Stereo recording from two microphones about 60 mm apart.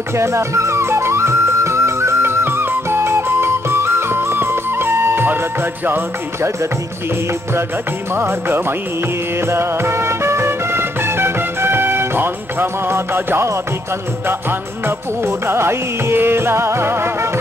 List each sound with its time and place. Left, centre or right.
0.1 s music: right
8.1 s music: right
14.9 s music: right